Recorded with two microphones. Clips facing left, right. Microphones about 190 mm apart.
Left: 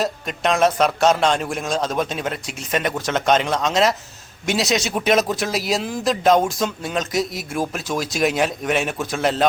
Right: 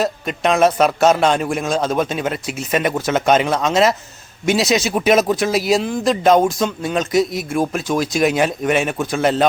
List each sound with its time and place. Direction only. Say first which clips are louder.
0.0 s a man's voice: right 3 dB; centre (ahead or behind)